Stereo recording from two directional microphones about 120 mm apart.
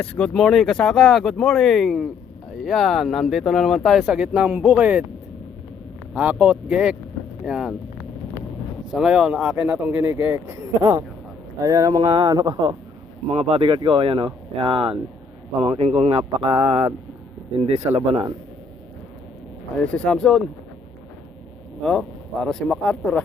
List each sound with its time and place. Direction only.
0.0 s speech: 10° left (ahead or behind); by 5.0 s 15° right (ahead or behind)
6.1 s speech: 10° right (ahead or behind)
8.9 s speech: 5° right (ahead or behind)
11.6 s speech: 30° right (ahead or behind)
13.3 s speech: 55° right (ahead or behind)
19.8 s a man's voice: 10° left (ahead or behind)
22.4 s a man's voice: 5° left (ahead or behind)